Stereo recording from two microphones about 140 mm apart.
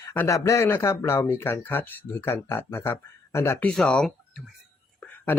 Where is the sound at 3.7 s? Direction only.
5° left (ahead or behind).